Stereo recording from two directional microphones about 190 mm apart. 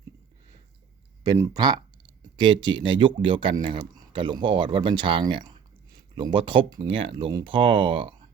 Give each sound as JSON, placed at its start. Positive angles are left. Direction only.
{"t": 1.2, "sound": "speech", "side_deg": -20}